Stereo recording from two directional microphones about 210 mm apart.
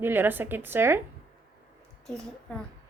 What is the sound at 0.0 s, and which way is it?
A woman's voice, 10° right (ahead or behind).